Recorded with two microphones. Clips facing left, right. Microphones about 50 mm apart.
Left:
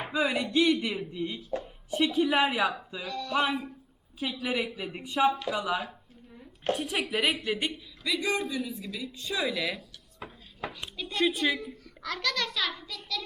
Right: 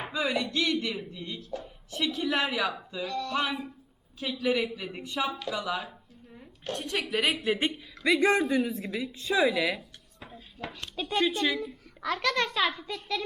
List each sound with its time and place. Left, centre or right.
0.1 s a woman's voice: centre
3.0 s music: centre
4.2 s speech: centre
6.7 s music: centre
7.3 s speech: centre
8.0 s a man's voice: right
8.9 s a child's voice: right
9.2 s speech: centre
11.3 s speech: centre
12.0 s a child's voice: centre